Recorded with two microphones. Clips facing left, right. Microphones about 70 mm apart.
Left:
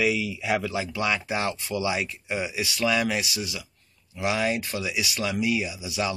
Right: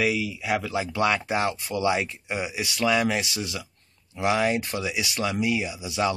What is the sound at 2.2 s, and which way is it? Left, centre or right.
Speech, centre.